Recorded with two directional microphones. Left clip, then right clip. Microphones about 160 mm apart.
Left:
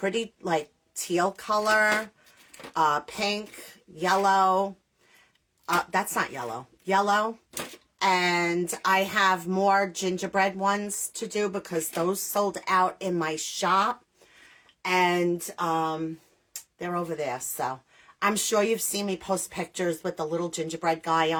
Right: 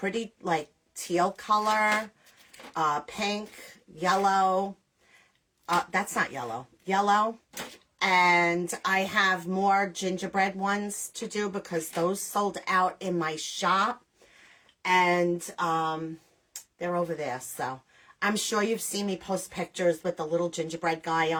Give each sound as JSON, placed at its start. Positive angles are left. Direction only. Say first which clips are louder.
{"t": 0.0, "sound": "speech", "louder": "left 3 dB", "side_deg": 30}
{"t": 17.0, "sound": "speech", "louder": "even", "side_deg": 30}